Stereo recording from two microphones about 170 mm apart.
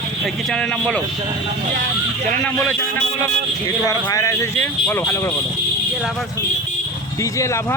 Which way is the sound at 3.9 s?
20° left (ahead or behind).